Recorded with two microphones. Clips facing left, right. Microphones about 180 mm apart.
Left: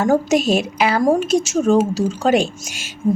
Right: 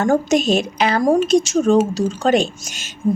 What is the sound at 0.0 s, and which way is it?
A woman's voice, 5° left (ahead or behind).